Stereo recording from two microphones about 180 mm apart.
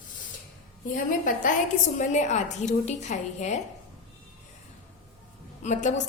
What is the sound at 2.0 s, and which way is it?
A woman's voice, 40° left (ahead or behind).